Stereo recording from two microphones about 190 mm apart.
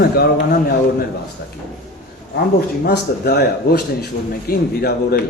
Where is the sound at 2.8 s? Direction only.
55° left (ahead or behind).